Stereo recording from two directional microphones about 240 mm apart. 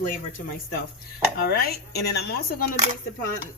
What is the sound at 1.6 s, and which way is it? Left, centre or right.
Speech, left.